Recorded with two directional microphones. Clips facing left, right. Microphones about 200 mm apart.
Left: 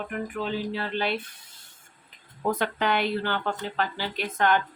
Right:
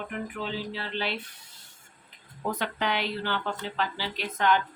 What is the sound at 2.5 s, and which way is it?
Speech, 50° left (ahead or behind).